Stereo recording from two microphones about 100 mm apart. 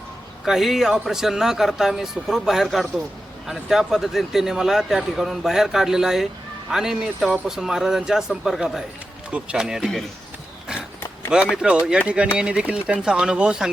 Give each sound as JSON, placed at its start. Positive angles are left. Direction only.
{"t": 0.4, "sound": "a man's voice", "side_deg": -5}
{"t": 11.3, "sound": "speech", "side_deg": -10}